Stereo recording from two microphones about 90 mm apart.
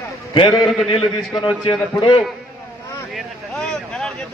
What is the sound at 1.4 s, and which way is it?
Speech, 75° left (ahead or behind).